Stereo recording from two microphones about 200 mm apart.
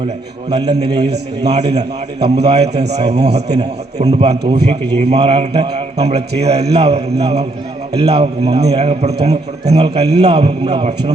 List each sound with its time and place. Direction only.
0.6 s a man's voice: 20° right (ahead or behind)
1.5 s a man's voice: 35° right (ahead or behind)